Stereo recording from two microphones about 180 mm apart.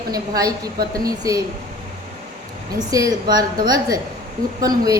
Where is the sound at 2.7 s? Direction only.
20° right (ahead or behind).